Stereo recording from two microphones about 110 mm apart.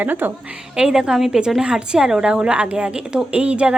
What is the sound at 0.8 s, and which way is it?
A woman's voice, 5° right (ahead or behind).